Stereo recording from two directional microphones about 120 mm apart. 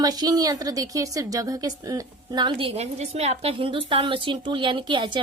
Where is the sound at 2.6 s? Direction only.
60° right (ahead or behind).